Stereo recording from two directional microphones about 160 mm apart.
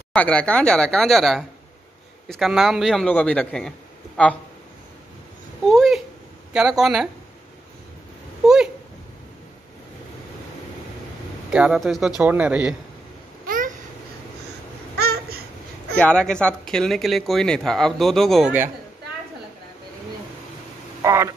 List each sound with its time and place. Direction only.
0.1 s speech: 10° left (ahead or behind)
5.7 s speech: centre (ahead or behind)
11.5 s speech: 5° right (ahead or behind)
13.5 s babbling: 55° right (ahead or behind)
15.0 s babbling: 80° right
16.0 s speech: 5° left (ahead or behind)
21.0 s speech: 15° right (ahead or behind)